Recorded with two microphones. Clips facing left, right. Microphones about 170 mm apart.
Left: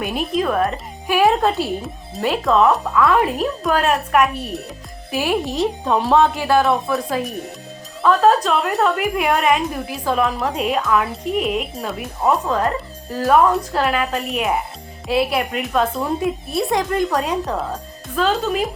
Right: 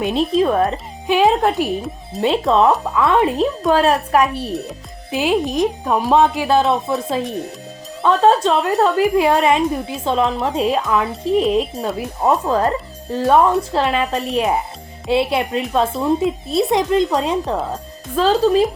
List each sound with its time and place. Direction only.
0.0 s speech: 25° right (ahead or behind)
5.1 s speech: 20° right (ahead or behind)